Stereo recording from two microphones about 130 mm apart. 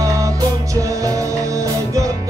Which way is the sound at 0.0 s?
25° right (ahead or behind).